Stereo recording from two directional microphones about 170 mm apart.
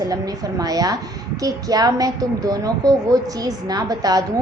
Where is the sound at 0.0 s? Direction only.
20° right (ahead or behind).